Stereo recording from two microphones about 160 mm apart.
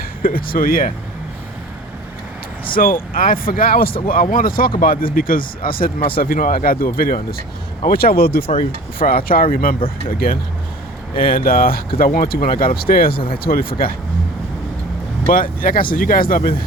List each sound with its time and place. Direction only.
0.2 s speech: 60° left (ahead or behind)
2.7 s speech: 60° left (ahead or behind)
15.3 s speech: 60° left (ahead or behind)